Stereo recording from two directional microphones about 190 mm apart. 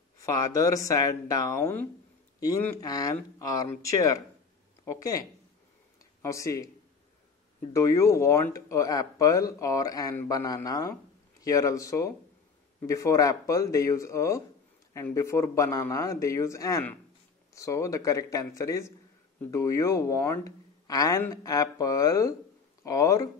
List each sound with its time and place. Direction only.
0.2 s speech: 20° left (ahead or behind)
6.2 s speech: 15° left (ahead or behind)
7.7 s speech: 15° left (ahead or behind)